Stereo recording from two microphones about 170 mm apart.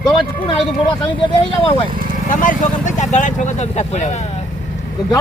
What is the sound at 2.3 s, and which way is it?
Speech, 50° left (ahead or behind).